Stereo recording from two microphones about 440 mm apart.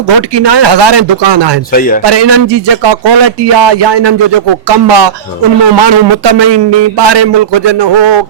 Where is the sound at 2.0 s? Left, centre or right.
Right.